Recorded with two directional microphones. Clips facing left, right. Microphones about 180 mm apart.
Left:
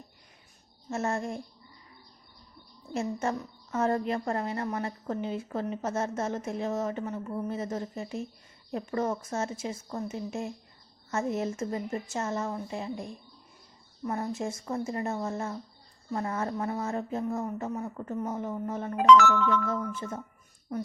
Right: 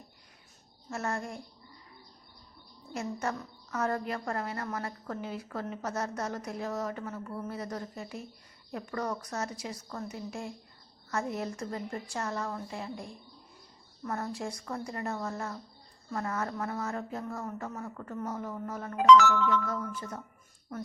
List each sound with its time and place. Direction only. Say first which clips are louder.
0.9 s a woman's voice: left 4 dB; 25° left (ahead or behind)
2.9 s a woman's voice: left 4 dB; 25° left (ahead or behind)
18.9 s speech: left 1 dB; 55° left (ahead or behind)
19.6 s a woman's voice: left 4 dB; 25° left (ahead or behind)